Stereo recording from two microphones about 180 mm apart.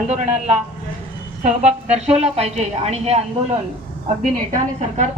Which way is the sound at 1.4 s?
40° right (ahead or behind).